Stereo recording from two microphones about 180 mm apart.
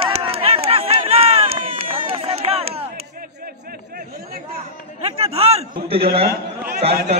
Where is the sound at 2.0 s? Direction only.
30° right (ahead or behind).